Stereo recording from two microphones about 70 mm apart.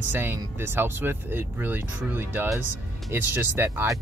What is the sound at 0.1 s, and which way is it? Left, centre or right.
Speech, right.